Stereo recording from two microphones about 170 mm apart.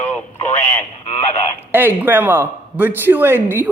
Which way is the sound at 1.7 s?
10° right (ahead or behind).